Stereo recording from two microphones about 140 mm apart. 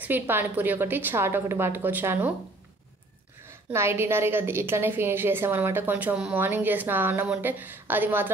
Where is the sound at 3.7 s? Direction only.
20° right (ahead or behind).